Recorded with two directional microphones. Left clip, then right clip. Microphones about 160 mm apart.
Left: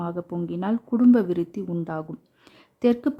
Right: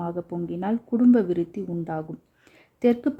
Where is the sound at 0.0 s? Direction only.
5° left (ahead or behind).